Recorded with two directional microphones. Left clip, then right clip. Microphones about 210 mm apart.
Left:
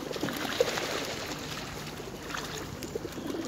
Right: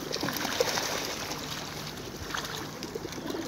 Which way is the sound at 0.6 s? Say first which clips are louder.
Left 1 dB; 55° right (ahead or behind).